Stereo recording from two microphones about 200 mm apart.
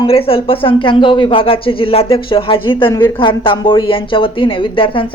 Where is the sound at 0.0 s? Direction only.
30° left (ahead or behind).